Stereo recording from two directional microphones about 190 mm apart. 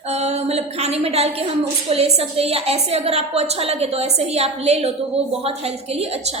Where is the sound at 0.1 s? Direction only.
35° right (ahead or behind).